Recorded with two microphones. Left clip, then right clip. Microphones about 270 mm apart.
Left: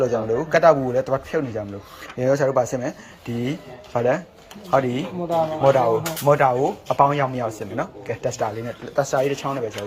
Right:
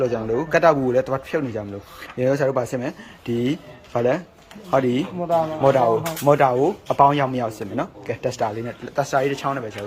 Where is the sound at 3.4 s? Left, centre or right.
Centre.